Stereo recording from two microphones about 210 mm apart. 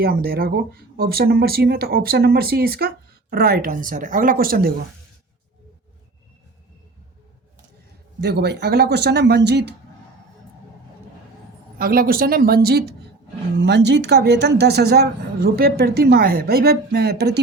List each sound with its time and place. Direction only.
0.0 s speech: 45° right (ahead or behind)
8.2 s speech: 50° right (ahead or behind)
11.8 s speech: 45° right (ahead or behind)